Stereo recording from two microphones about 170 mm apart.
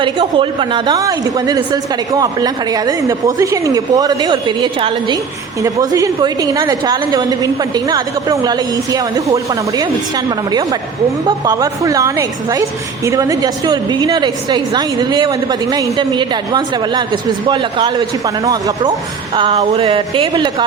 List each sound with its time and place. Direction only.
0.0 s a woman's voice: 30° right (ahead or behind)
19.4 s speech: 35° right (ahead or behind)